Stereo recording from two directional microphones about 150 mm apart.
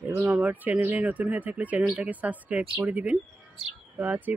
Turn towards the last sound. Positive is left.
turn(degrees=-10)  # may be behind; listen again after turning